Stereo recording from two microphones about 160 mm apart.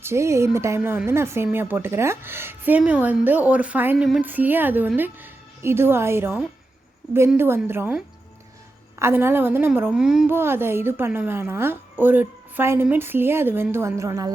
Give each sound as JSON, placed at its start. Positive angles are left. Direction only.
{"t": 0.0, "sound": "a woman's voice", "side_deg": -15}
{"t": 9.0, "sound": "a woman's voice", "side_deg": -15}